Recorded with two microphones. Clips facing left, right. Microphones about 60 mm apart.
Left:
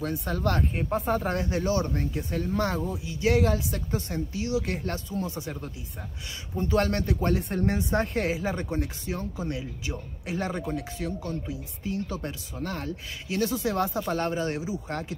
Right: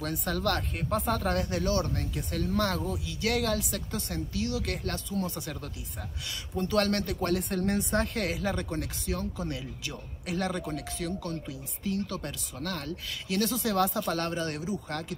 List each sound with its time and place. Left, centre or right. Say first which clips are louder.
0.0 s speech: left 2 dB; centre
2.7 s speech: left 2 dB; centre
6.6 s speech: left 2 dB; centre
13.3 s speech: left 2 dB; centre
14.9 s speech: left 2 dB; left